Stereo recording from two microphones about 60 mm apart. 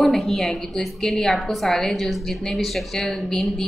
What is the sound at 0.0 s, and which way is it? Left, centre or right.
A woman's voice, centre.